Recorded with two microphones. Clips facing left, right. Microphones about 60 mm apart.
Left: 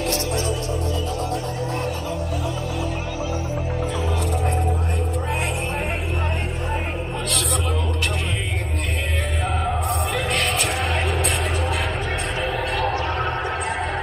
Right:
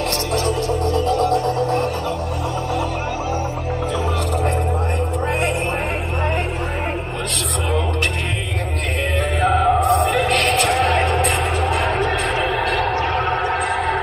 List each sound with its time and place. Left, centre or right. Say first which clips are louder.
0.3 s music: right 5 dB; right
9.4 s music: right 10 dB; right
12.0 s music: right 6 dB; right